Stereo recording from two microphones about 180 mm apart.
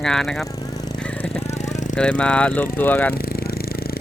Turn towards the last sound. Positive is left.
turn(degrees=60)  # may be behind; listen again after turning